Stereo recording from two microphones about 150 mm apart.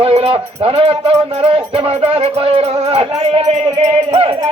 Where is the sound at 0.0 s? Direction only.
40° right (ahead or behind).